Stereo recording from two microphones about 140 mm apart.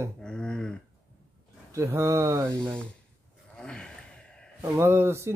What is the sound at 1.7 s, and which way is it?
Speech, 20° right (ahead or behind).